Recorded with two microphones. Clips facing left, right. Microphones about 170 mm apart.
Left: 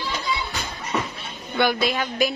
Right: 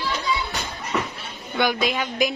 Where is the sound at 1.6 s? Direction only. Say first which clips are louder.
Left 1 dB; 15° right (ahead or behind).